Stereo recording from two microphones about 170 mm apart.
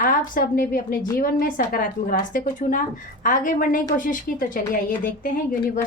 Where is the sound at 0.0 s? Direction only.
55° left (ahead or behind).